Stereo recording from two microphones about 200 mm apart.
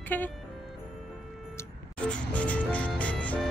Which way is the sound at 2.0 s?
5° left (ahead or behind).